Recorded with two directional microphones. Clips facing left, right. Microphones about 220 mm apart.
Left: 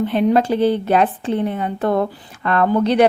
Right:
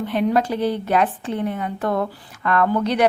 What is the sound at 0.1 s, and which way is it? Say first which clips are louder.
A woman's voice: left 1 dB; 25° left (ahead or behind).